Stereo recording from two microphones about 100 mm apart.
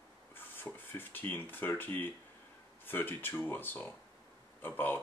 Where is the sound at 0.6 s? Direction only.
20° left (ahead or behind).